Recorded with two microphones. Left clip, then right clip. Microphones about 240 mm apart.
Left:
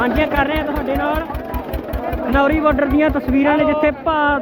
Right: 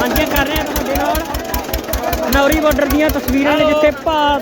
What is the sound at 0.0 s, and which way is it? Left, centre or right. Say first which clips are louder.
Speech: right 1 dB; centre.